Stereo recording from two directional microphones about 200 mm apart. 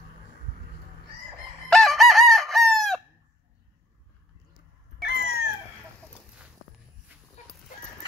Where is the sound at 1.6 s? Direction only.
Centre (ahead or behind).